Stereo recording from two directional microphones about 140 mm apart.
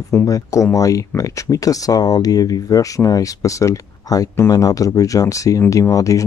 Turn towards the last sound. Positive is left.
turn(degrees=25)  # may be behind; listen again after turning